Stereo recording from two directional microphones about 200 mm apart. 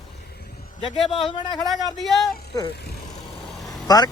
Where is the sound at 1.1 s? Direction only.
25° left (ahead or behind).